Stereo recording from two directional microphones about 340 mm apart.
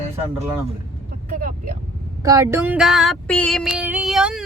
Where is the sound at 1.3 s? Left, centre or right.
Right.